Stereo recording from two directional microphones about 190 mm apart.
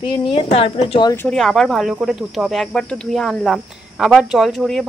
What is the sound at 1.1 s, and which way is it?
Speech, 10° left (ahead or behind).